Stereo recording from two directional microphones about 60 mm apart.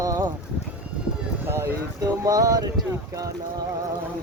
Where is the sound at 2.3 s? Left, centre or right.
Right.